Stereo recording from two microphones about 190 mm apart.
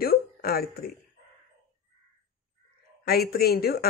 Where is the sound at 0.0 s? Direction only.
55° left (ahead or behind).